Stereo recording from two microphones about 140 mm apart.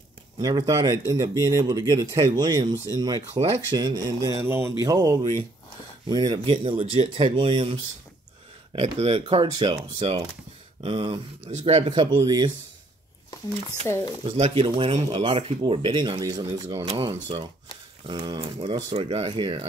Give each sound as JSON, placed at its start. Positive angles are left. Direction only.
{"t": 0.4, "sound": "speech", "side_deg": -25}
{"t": 12.0, "sound": "speech", "side_deg": -30}
{"t": 13.8, "sound": "speech", "side_deg": 20}
{"t": 14.3, "sound": "speech", "side_deg": -50}
{"t": 14.6, "sound": "speech", "side_deg": -40}
{"t": 16.8, "sound": "speech", "side_deg": -40}